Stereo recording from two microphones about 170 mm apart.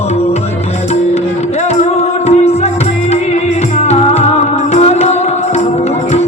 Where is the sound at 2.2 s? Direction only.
40° left (ahead or behind).